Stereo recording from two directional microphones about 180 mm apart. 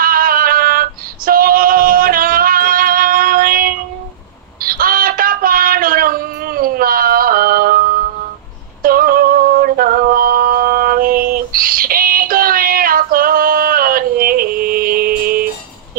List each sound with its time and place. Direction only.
0.0 s female singing: 55° right (ahead or behind)
4.6 s a sound: 55° right (ahead or behind)
8.8 s music: 55° right (ahead or behind)